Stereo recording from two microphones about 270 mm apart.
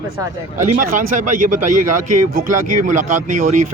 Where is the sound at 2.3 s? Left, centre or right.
Right.